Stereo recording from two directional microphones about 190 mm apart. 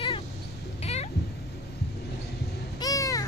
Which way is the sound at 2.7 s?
20° left (ahead or behind).